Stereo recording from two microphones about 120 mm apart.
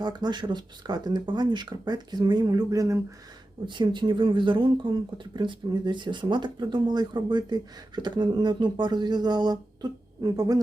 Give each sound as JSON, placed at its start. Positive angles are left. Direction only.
{"t": 0.0, "sound": "speech", "side_deg": -35}
{"t": 3.7, "sound": "speech", "side_deg": -40}